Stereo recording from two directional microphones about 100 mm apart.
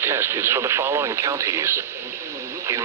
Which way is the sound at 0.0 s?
25° right (ahead or behind).